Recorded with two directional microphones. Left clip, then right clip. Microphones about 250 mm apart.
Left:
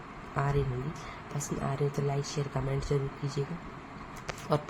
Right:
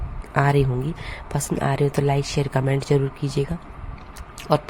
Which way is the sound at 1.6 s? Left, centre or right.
Right.